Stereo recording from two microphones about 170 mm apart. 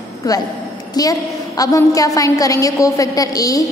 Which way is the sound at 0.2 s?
20° left (ahead or behind).